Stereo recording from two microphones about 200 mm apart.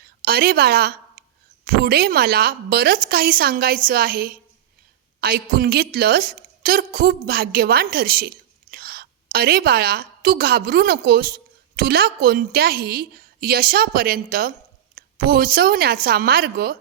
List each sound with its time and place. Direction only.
0.0 s a woman's voice: 50° right (ahead or behind)